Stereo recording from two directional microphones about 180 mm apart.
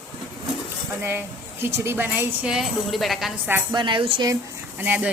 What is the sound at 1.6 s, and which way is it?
A woman's voice, 15° right (ahead or behind).